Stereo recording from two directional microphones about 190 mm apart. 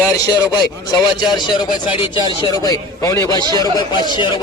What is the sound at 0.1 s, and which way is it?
Speech, 20° left (ahead or behind).